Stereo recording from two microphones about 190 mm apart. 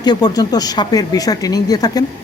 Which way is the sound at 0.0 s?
20° left (ahead or behind).